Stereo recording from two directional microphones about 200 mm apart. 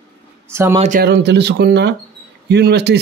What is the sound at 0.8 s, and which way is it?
Speech, 45° right (ahead or behind).